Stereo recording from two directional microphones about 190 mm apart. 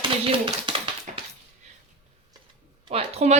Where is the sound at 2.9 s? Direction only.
35° right (ahead or behind).